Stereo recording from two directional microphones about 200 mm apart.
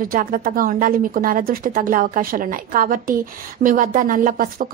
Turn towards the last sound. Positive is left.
turn(degrees=-45)  # may be behind; listen again after turning